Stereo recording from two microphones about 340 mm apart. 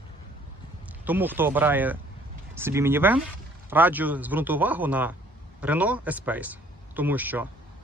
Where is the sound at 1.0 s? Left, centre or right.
Centre.